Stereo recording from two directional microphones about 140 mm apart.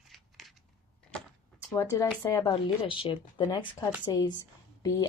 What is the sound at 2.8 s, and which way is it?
Speech, 40° left (ahead or behind).